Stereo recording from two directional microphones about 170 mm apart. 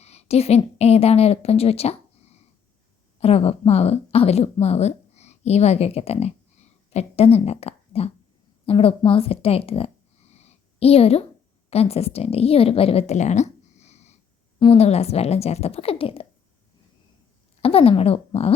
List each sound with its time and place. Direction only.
0.0 s a woman's voice: 40° left (ahead or behind)
17.6 s a woman's voice: 35° left (ahead or behind)